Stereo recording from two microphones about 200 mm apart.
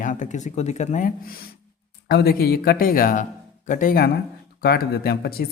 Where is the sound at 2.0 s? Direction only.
50° left (ahead or behind).